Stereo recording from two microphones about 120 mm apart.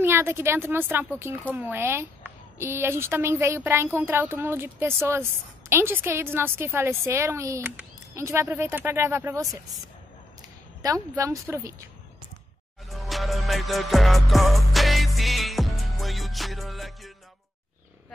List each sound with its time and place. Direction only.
0.0 s speech: 20° right (ahead or behind)
10.8 s speech: 30° right (ahead or behind)
12.9 s music: centre (ahead or behind)